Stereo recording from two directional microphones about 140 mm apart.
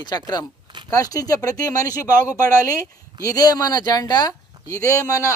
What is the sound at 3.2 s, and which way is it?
Speech, 25° left (ahead or behind).